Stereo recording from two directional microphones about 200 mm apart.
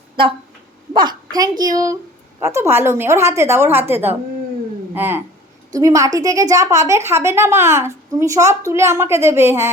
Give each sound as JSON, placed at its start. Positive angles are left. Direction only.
{"t": 0.9, "sound": "a woman's voice", "side_deg": -20}